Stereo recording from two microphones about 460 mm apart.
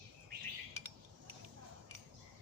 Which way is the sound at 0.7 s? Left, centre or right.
Right.